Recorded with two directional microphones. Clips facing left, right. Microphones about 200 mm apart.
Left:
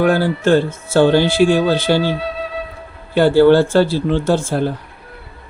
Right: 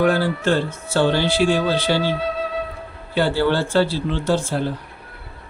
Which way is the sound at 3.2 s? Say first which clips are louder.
Left 9 dB; 45° left (ahead or behind).